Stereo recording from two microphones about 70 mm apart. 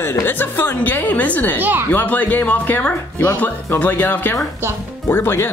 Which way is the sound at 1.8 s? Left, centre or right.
Left.